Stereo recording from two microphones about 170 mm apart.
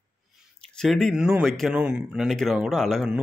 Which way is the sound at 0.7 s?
5° left (ahead or behind).